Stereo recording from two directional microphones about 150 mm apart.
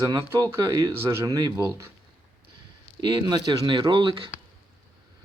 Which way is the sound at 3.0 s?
30° right (ahead or behind).